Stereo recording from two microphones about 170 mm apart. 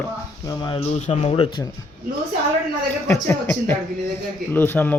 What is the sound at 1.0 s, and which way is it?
Speech, 40° left (ahead or behind).